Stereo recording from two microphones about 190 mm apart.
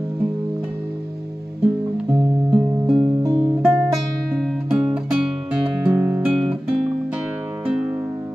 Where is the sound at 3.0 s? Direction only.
20° right (ahead or behind).